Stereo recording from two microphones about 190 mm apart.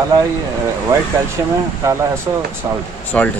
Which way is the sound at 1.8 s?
15° right (ahead or behind).